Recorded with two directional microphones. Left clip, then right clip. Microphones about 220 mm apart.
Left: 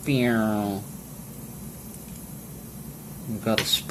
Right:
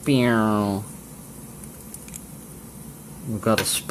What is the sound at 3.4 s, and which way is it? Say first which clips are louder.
Speech: right 2 dB; 35° right (ahead or behind).